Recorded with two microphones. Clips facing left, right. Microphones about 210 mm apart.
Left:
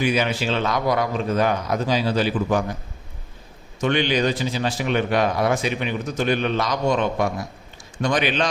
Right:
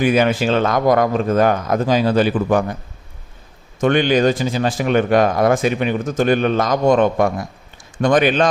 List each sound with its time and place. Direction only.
0.0 s a man's voice: 50° right (ahead or behind)
3.8 s a man's voice: 50° right (ahead or behind)